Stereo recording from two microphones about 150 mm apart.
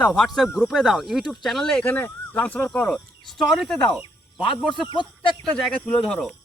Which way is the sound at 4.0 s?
35° left (ahead or behind).